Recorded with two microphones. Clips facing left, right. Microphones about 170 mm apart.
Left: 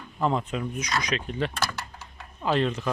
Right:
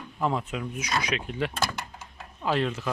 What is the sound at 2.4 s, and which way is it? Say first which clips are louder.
Speech: left 2 dB; 5° right (ahead or behind).